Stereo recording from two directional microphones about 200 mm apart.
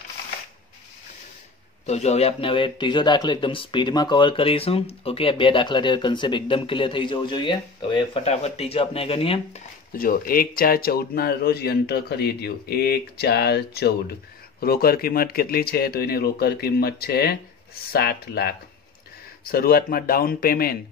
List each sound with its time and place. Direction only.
1.9 s a man's voice: 35° left (ahead or behind)
9.9 s a man's voice: 45° left (ahead or behind)